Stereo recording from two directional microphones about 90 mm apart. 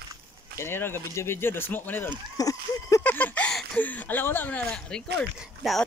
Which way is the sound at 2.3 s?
40° left (ahead or behind).